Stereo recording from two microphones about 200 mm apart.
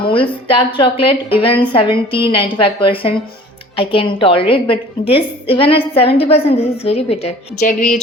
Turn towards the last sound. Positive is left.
turn(degrees=40)  # may be behind; listen again after turning